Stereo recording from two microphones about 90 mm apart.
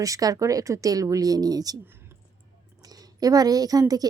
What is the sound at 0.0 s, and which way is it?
Speech, 40° right (ahead or behind).